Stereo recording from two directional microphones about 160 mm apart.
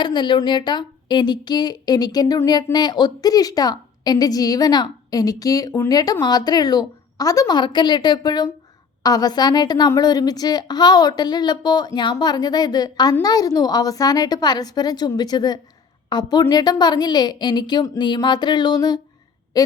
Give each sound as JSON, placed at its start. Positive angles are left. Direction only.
{"t": 0.0, "sound": "a woman's voice", "side_deg": 30}